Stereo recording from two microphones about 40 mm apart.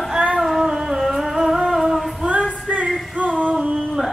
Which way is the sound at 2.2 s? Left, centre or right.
Right.